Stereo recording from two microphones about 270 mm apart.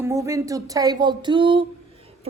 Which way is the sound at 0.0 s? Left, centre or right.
Centre.